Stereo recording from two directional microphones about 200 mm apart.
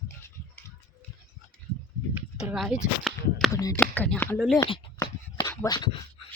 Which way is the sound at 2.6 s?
Centre (ahead or behind).